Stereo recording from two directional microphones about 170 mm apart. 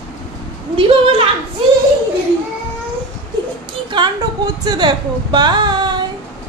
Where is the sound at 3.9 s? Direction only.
25° right (ahead or behind).